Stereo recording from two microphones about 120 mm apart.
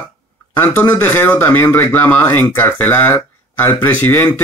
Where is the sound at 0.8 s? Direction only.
15° left (ahead or behind).